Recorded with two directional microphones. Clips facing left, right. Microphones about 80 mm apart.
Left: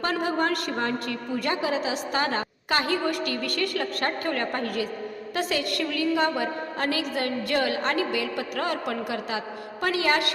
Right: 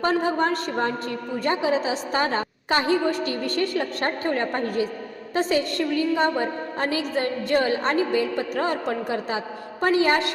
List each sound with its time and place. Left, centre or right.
0.0 s a woman's voice: right